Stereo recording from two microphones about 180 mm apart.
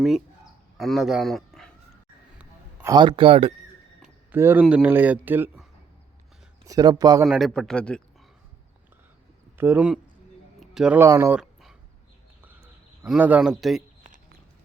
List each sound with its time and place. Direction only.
0.8 s speech: centre (ahead or behind)
2.4 s a sound: 5° right (ahead or behind)
2.9 s speech: 25° right (ahead or behind)
4.0 s a sound: 10° right (ahead or behind)
4.6 s speech: 10° right (ahead or behind)
6.7 s speech: 20° right (ahead or behind)
7.3 s speech: centre (ahead or behind)
9.6 s speech: 10° right (ahead or behind)
11.3 s a sound: 5° right (ahead or behind)
13.0 s speech: 10° right (ahead or behind)